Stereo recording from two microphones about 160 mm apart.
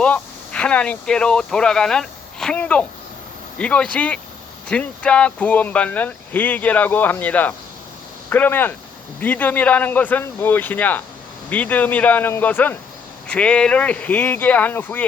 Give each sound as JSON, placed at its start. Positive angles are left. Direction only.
{"t": 0.0, "sound": "speech", "side_deg": 5}